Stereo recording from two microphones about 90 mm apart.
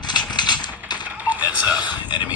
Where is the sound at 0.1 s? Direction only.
50° left (ahead or behind).